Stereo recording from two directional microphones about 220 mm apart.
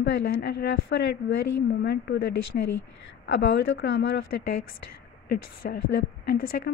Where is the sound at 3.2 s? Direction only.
55° left (ahead or behind).